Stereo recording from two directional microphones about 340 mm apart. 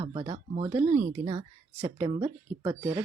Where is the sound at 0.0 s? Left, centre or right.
Centre.